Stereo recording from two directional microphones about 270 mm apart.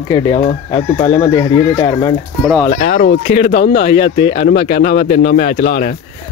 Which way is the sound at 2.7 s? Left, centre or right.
Left.